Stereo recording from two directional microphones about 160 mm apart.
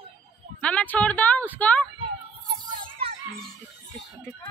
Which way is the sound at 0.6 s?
10° left (ahead or behind).